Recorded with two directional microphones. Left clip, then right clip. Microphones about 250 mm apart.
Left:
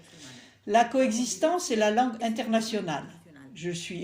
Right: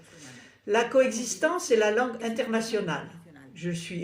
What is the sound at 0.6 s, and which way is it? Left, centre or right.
Speech, centre.